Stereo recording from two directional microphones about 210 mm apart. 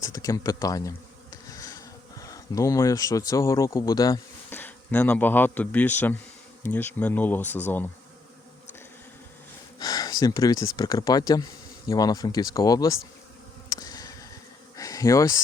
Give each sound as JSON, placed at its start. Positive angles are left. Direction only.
{"t": 0.0, "sound": "speech", "side_deg": 15}
{"t": 9.7, "sound": "speech", "side_deg": 15}
{"t": 13.7, "sound": "insect", "side_deg": 15}